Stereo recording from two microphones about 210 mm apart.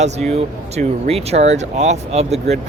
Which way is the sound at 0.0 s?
30° right (ahead or behind).